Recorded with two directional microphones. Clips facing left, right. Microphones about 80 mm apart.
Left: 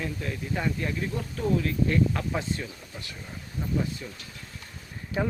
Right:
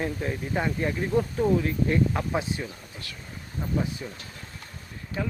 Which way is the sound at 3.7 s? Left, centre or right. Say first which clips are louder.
Right 1 dB; right.